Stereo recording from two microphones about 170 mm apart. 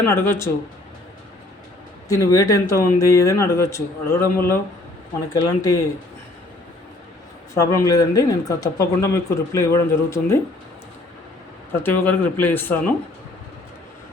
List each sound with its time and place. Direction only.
0.0 s speech: 15° left (ahead or behind)
2.0 s speech: 20° left (ahead or behind)
7.5 s speech: 20° left (ahead or behind)
11.8 s speech: 10° left (ahead or behind)